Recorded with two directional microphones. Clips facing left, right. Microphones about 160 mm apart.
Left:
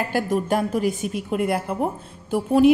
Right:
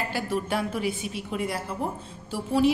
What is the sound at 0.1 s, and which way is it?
A woman's voice, 45° left (ahead or behind).